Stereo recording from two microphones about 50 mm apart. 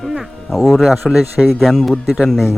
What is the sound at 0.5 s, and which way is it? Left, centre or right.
Speech, centre.